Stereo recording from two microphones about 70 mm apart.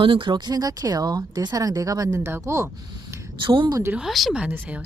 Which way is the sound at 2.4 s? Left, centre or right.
Right.